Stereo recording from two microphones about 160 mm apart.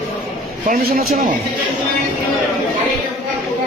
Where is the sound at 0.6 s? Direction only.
60° right (ahead or behind).